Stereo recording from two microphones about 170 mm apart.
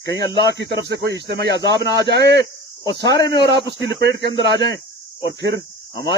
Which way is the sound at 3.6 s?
90° right.